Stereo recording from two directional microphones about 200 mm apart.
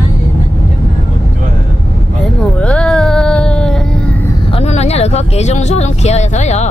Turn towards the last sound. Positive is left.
turn(degrees=35)  # may be behind; listen again after turning